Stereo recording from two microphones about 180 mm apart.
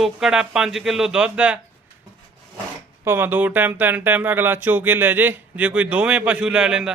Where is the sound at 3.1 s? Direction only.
10° right (ahead or behind).